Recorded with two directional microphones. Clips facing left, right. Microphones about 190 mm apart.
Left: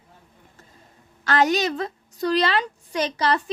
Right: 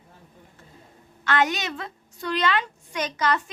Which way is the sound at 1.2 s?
35° left (ahead or behind).